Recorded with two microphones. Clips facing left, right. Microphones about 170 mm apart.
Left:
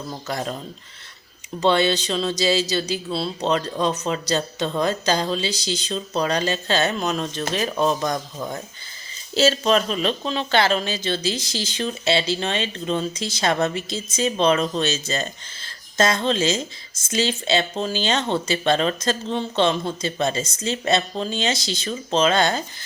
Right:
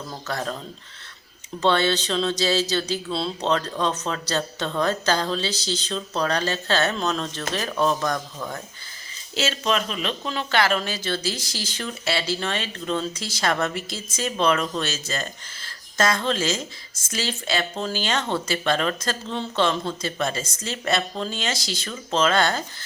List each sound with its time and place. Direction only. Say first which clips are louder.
0.3 s speech: left 1 dB; 15° left (ahead or behind)
1.6 s speech: left 2 dB; 15° left (ahead or behind)
9.3 s speech: left 6 dB; 35° left (ahead or behind); by 22.6 s 20° left (ahead or behind)